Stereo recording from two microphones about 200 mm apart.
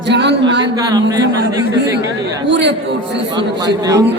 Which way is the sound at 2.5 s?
65° right (ahead or behind).